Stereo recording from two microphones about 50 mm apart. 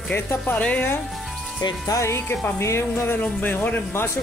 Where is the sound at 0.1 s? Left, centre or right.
Left.